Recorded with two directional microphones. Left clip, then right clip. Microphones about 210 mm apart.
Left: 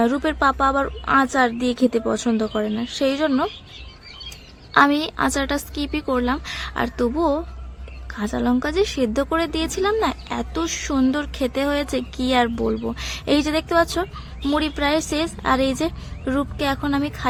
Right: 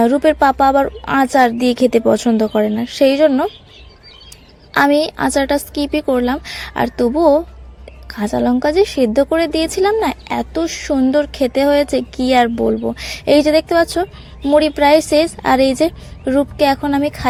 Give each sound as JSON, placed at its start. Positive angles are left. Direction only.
{"t": 0.0, "sound": "speech", "side_deg": -20}
{"t": 4.7, "sound": "speech", "side_deg": -20}